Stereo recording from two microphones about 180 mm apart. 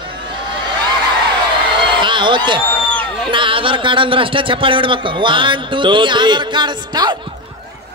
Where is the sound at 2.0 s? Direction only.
25° right (ahead or behind).